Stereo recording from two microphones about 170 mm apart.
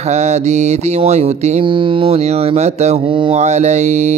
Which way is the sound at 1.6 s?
30° right (ahead or behind).